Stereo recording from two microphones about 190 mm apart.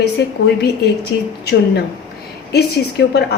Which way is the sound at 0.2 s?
65° left (ahead or behind).